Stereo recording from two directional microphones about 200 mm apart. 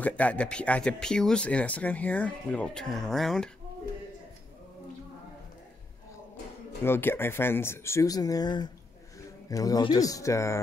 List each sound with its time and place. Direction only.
0.0 s speech: 5° left (ahead or behind)
6.8 s speech: 10° left (ahead or behind)